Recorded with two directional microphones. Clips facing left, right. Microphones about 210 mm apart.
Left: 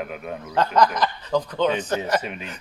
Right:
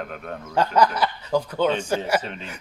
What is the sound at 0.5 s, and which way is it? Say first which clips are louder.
Speech: even; 10° right (ahead or behind).